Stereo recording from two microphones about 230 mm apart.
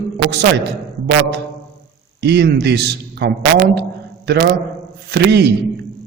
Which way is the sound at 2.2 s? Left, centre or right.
Right.